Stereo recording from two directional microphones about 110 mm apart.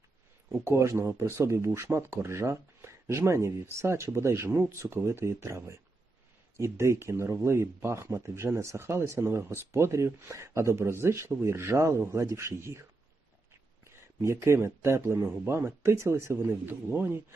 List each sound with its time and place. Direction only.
0.6 s speech: 25° right (ahead or behind)
13.8 s speech: 25° right (ahead or behind)